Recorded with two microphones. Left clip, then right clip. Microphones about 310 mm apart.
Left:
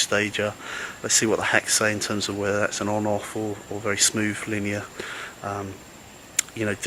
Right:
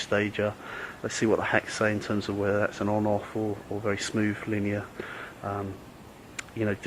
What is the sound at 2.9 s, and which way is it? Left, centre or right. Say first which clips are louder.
Speech: left 2 dB; right.